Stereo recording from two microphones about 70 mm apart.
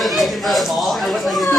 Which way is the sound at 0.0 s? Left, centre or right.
Centre.